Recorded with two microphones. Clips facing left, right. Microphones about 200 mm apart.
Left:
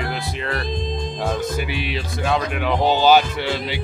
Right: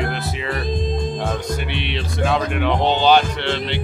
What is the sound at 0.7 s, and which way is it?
Speech, 50° right (ahead or behind).